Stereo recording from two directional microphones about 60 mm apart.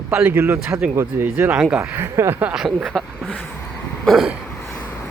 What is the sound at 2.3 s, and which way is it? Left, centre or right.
Speech, right.